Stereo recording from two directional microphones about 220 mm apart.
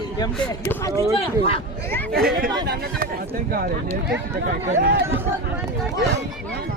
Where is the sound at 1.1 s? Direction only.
25° left (ahead or behind).